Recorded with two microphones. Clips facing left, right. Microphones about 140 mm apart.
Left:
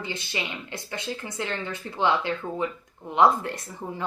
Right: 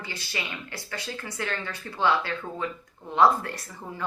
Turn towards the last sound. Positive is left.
turn(degrees=20)  # may be behind; listen again after turning